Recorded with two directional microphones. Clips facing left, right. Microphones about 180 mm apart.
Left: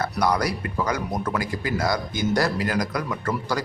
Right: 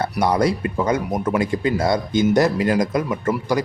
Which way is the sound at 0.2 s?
25° right (ahead or behind).